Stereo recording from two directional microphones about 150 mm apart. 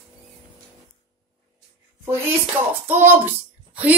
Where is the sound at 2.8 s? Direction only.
15° right (ahead or behind).